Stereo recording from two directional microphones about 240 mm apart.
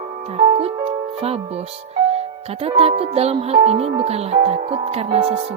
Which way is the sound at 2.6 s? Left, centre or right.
Right.